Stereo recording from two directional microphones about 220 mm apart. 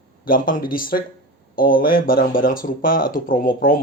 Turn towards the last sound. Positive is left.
turn(degrees=40)  # may be behind; listen again after turning